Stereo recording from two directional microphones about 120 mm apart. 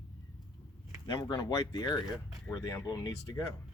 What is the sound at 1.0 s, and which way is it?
Speech, 35° left (ahead or behind).